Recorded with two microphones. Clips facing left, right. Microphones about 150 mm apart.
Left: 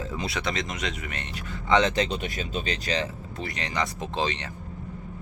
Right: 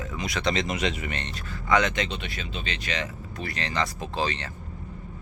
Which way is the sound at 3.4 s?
20° left (ahead or behind).